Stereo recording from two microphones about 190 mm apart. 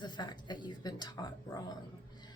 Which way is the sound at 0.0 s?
25° left (ahead or behind).